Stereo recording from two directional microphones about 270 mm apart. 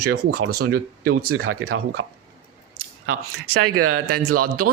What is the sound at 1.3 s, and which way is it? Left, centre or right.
Speech, right.